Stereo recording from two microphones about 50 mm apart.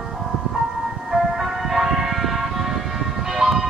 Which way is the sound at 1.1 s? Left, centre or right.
Centre.